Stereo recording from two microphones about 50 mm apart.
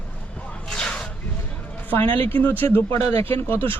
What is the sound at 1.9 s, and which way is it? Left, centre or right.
Speech, left.